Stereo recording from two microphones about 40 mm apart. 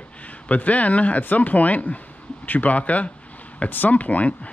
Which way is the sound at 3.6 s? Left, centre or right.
Left.